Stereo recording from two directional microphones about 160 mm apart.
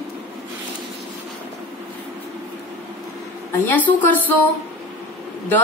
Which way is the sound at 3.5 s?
10° left (ahead or behind).